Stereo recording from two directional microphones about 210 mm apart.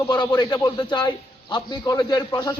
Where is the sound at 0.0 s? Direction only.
20° left (ahead or behind).